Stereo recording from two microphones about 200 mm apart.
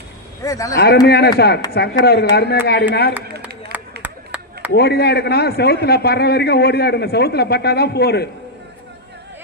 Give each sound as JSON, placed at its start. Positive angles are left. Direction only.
{"t": 0.4, "sound": "speech", "side_deg": 15}
{"t": 1.0, "sound": "speech", "side_deg": 55}
{"t": 3.4, "sound": "a sound", "side_deg": -5}
{"t": 4.7, "sound": "speech", "side_deg": 55}